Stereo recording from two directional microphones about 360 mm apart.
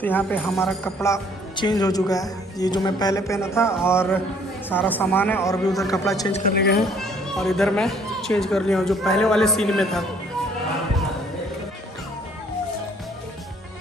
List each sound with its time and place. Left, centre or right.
0.0 s speech: centre
6.4 s speech: left
6.8 s speech: centre